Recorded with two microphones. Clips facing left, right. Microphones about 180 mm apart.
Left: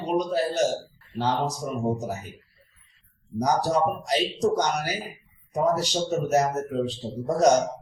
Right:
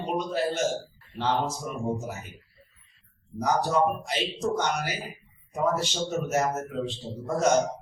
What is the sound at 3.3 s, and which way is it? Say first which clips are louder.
Speech: left 2 dB; 35° left (ahead or behind).